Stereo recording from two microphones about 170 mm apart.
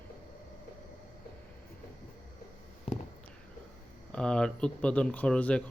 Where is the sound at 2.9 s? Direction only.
35° left (ahead or behind).